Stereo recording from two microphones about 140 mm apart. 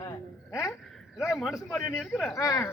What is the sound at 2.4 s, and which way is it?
Speech, 25° left (ahead or behind).